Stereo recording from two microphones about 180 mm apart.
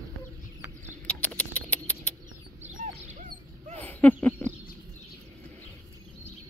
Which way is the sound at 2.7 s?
45° right (ahead or behind).